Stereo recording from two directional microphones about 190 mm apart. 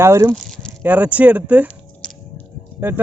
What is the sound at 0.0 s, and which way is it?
Speech, 15° right (ahead or behind).